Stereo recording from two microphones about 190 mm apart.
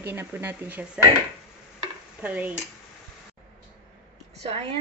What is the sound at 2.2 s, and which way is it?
Speech, 10° right (ahead or behind).